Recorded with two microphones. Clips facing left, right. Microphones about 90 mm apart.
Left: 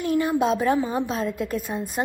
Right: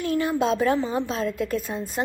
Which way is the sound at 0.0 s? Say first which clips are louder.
Left 1 dB; 20° left (ahead or behind).